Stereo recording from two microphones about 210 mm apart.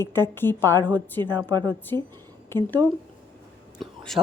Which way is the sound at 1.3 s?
20° right (ahead or behind).